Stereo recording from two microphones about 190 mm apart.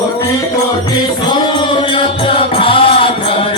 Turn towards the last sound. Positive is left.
turn(degrees=30)  # may be behind; listen again after turning